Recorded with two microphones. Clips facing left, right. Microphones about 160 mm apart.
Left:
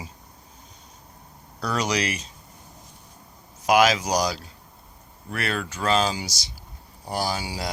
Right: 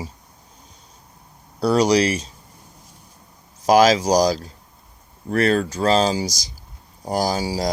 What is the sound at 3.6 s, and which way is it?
Speech, 35° right (ahead or behind).